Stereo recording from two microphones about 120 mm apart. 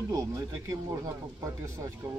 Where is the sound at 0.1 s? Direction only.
25° right (ahead or behind).